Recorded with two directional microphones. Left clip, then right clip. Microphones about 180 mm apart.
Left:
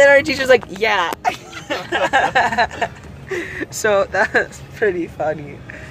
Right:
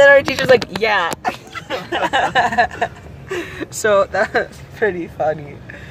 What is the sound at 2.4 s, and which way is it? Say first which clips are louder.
Speech: right 1 dB; 5° right (ahead or behind).